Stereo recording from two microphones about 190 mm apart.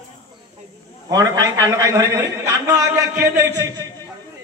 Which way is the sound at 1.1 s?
20° right (ahead or behind).